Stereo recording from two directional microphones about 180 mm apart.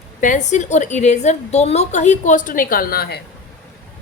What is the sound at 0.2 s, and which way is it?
A woman's voice, 45° left (ahead or behind).